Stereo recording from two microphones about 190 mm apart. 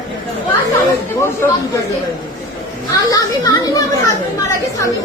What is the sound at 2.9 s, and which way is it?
A woman's voice, 20° left (ahead or behind).